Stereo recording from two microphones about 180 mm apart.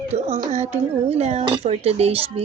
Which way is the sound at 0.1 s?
40° right (ahead or behind).